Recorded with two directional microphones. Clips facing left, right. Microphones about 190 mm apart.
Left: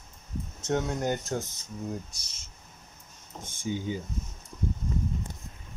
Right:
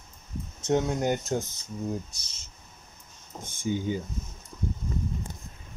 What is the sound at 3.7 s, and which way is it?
Speech, 50° right (ahead or behind).